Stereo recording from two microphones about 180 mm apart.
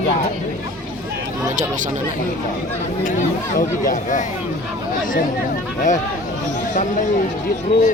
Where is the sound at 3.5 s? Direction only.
50° left (ahead or behind).